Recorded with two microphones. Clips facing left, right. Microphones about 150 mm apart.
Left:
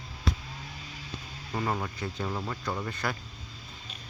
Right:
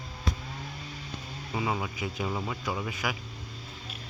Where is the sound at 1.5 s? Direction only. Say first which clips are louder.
Even; 5° right (ahead or behind).